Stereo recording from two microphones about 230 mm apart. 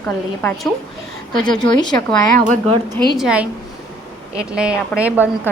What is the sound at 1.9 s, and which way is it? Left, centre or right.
Speech, centre.